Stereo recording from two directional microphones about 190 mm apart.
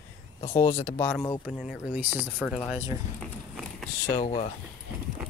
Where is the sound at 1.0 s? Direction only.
15° left (ahead or behind).